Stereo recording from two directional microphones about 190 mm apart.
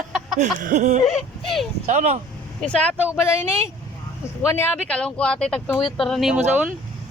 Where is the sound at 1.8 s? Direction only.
40° right (ahead or behind).